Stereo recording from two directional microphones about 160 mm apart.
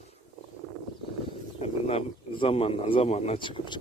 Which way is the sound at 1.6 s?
40° left (ahead or behind).